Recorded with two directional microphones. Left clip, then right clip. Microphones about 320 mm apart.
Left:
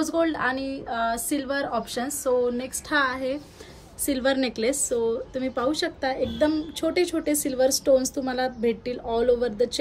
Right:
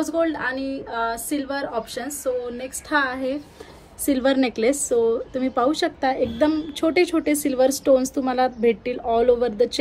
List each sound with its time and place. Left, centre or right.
0.0 s a woman's voice: centre
4.0 s a woman's voice: centre